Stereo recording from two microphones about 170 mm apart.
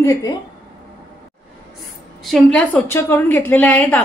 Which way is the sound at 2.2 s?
5° left (ahead or behind).